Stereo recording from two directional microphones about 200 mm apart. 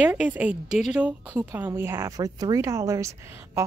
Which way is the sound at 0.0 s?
5° right (ahead or behind).